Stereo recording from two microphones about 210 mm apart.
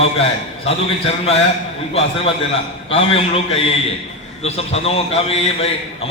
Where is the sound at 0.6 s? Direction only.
30° left (ahead or behind).